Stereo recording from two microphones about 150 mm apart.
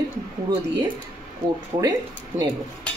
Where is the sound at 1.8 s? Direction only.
25° right (ahead or behind).